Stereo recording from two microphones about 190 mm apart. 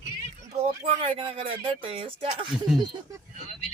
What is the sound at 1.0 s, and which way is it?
Speech, 30° right (ahead or behind).